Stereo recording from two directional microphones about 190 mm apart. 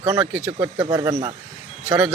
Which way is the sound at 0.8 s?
20° right (ahead or behind).